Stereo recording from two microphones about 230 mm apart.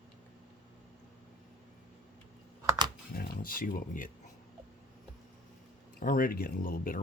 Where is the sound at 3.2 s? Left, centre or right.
Left.